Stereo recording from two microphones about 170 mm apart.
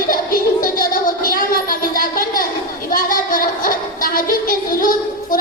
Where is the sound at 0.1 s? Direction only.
55° left (ahead or behind).